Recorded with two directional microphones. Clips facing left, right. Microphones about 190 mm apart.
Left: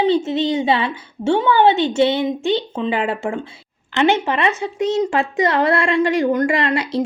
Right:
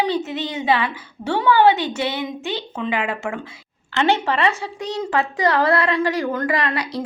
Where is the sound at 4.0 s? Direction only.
20° left (ahead or behind).